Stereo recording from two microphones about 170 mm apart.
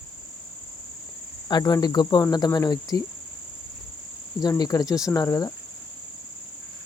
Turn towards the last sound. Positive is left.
turn(degrees=20)  # may be behind; listen again after turning